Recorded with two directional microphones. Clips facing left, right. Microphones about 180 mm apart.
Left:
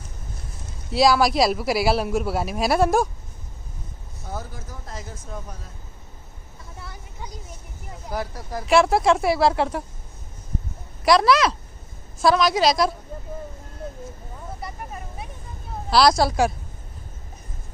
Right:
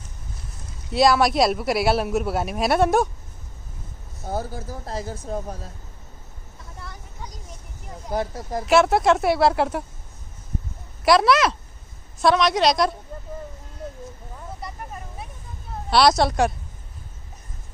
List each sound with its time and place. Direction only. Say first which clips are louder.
0.9 s a man's voice: even; centre (ahead or behind)
4.3 s speech: right 6 dB; 35° right (ahead or behind)
8.1 s speech: right 4 dB; 25° right (ahead or behind)
8.6 s a man's voice: even; centre (ahead or behind)
11.1 s a man's voice: even; centre (ahead or behind)
15.9 s a man's voice: even; centre (ahead or behind)